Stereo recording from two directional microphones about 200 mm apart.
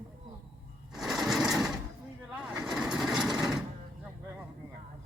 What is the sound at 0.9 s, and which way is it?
Sewing machine, centre (ahead or behind).